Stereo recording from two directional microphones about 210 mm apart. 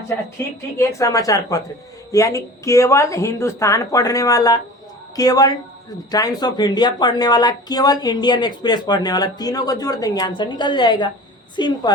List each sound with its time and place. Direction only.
0.8 s speech: 15° left (ahead or behind)